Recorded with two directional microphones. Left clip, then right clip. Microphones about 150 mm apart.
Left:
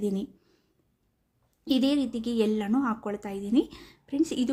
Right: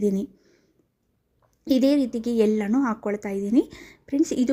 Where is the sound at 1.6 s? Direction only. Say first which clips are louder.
Right 5 dB; 30° right (ahead or behind).